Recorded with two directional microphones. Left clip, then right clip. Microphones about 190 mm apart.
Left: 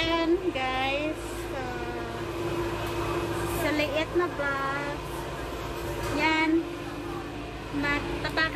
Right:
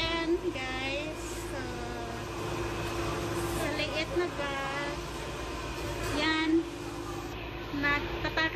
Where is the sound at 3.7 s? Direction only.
10° left (ahead or behind).